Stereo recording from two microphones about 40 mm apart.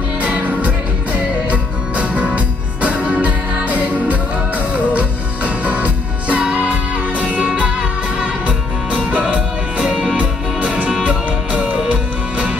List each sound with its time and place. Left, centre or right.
0.2 s music: right
8.2 s music: right
11.9 s music: right